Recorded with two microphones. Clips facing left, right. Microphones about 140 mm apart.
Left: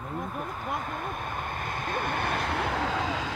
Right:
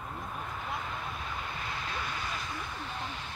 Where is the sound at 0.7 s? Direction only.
50° left (ahead or behind); by 3.3 s 90° left.